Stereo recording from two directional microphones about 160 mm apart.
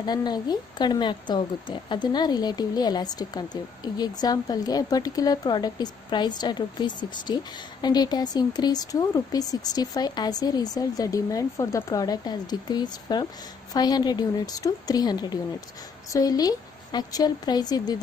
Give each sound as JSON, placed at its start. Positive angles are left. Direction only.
{"t": 0.0, "sound": "a woman's voice", "side_deg": 25}